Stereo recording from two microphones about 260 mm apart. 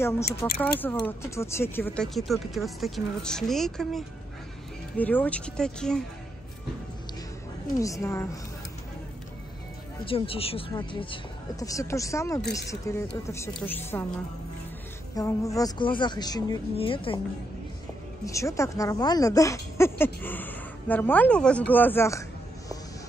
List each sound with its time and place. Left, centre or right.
0.3 s speech: centre
7.8 s speech: centre
10.0 s speech: left
15.1 s speech: centre
18.2 s speech: centre